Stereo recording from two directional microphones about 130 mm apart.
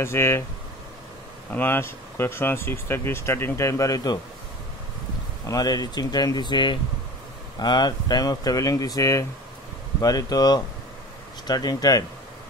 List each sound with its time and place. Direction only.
0.0 s speech: 20° left (ahead or behind)
1.5 s speech: 15° left (ahead or behind)
5.5 s speech: 30° left (ahead or behind)